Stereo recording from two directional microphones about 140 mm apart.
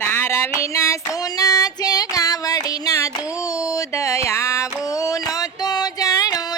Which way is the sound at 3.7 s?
20° left (ahead or behind).